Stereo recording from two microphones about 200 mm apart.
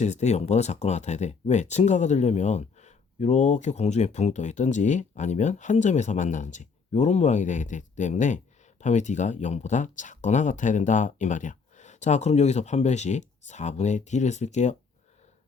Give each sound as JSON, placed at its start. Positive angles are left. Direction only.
{"t": 0.0, "sound": "speech", "side_deg": 35}